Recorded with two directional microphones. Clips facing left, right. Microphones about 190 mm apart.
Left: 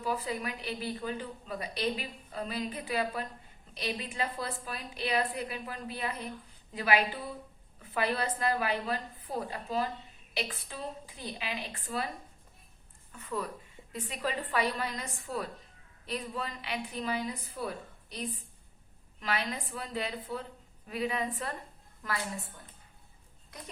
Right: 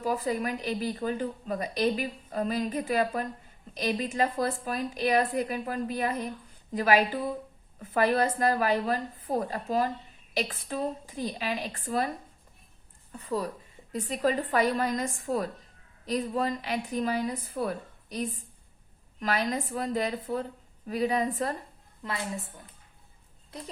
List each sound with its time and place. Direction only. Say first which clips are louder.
0.0 s a woman's voice: right 5 dB; 45° right (ahead or behind)
13.1 s a woman's voice: right 5 dB; 35° right (ahead or behind)
22.0 s a woman's voice: right 1 dB; 25° right (ahead or behind)
23.5 s speech: right 7 dB; 30° right (ahead or behind)